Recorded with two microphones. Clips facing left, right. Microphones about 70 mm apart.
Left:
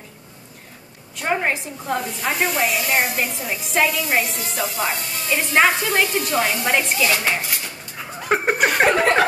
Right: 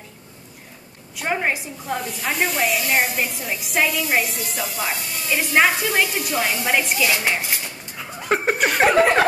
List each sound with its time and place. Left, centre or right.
1.1 s speech: centre